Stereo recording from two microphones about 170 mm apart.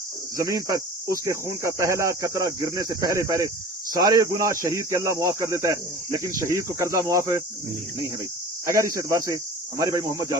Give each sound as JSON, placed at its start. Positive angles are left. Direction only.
{"t": 0.3, "sound": "speech", "side_deg": -20}
{"t": 8.6, "sound": "speech", "side_deg": -20}